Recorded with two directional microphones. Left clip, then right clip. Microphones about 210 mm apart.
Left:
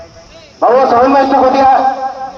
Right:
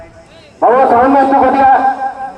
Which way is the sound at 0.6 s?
30° left (ahead or behind).